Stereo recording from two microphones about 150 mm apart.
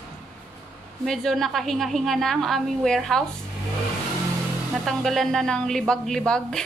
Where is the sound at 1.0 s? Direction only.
Centre (ahead or behind).